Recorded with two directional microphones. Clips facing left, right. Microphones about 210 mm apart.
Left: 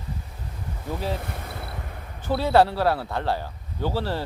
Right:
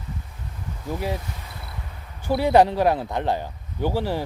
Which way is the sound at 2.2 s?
15° right (ahead or behind).